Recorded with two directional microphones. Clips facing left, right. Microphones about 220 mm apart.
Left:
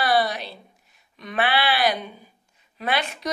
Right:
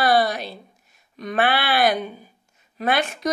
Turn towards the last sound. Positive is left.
turn(degrees=-45)  # may be behind; listen again after turning